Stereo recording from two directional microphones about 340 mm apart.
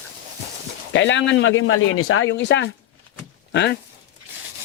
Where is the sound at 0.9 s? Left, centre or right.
Left.